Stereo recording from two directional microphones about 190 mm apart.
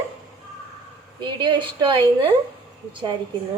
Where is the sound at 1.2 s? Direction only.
25° right (ahead or behind).